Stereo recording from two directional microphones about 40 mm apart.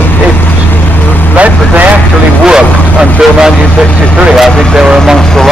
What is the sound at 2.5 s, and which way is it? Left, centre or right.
Speech, centre.